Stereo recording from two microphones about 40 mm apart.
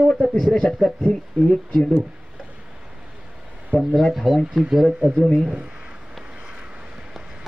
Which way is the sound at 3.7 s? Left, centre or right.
Right.